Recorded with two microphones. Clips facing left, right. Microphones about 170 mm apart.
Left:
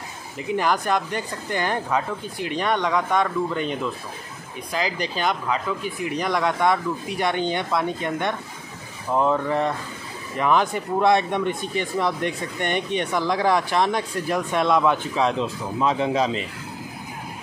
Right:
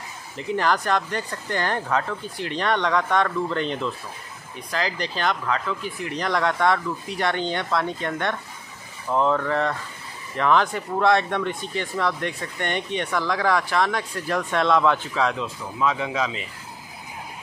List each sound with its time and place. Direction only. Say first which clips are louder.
0.6 s speech: even; 10° left (ahead or behind); by 16.4 s 30° left (ahead or behind)